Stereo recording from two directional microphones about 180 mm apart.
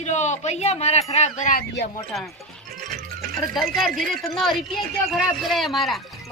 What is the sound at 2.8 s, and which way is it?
Music, 50° right (ahead or behind).